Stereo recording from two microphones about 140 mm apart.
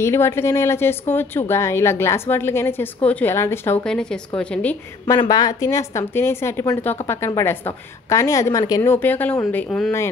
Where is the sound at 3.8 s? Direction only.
5° left (ahead or behind).